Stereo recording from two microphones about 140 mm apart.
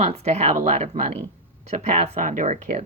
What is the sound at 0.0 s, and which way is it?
A woman's voice, 50° right (ahead or behind).